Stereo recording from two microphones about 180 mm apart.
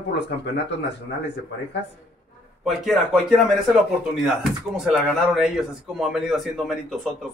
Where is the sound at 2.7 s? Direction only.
Centre (ahead or behind).